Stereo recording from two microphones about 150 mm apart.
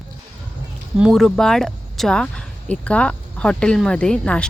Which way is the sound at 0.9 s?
Centre (ahead or behind).